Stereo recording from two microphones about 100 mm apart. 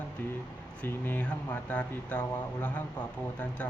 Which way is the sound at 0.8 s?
20° left (ahead or behind).